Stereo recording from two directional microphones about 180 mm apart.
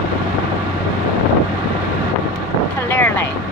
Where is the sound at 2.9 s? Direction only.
10° left (ahead or behind).